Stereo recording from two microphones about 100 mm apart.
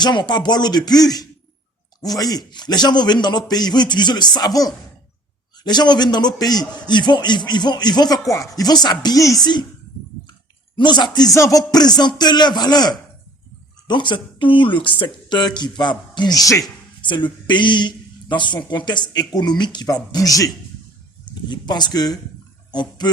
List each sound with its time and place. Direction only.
0.0 s a man's voice: 50° left (ahead or behind)
10.8 s a man's voice: 50° left (ahead or behind)
11.3 s a man's voice: 35° left (ahead or behind)
17.0 s a sound: 50° left (ahead or behind)
17.4 s a man's voice: 50° left (ahead or behind)
21.5 s a man's voice: 45° left (ahead or behind)